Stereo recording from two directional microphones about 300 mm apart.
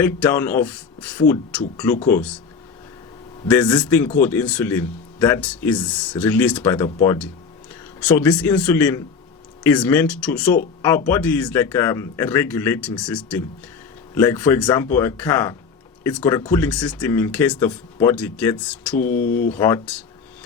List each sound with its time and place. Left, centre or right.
0.0 s a man's voice: centre
3.5 s a man's voice: centre
18.9 s speech: left
19.5 s a man's voice: centre